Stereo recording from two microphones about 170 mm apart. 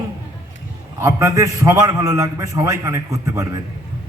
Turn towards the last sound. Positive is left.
turn(degrees=-20)  # may be behind; listen again after turning